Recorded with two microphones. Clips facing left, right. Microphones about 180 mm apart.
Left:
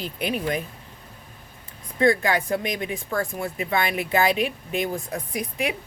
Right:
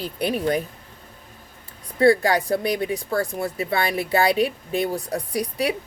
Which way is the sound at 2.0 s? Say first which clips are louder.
Right 3 dB; 35° right (ahead or behind).